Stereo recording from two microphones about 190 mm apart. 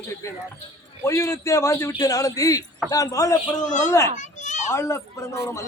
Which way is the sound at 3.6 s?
40° left (ahead or behind).